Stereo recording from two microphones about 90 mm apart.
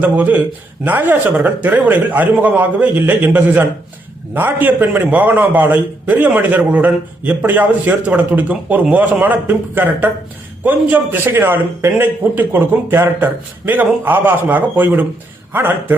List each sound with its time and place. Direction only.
0.0 s a man's voice: 15° right (ahead or behind)